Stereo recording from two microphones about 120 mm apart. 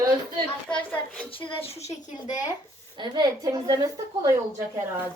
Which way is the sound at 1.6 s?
65° left (ahead or behind).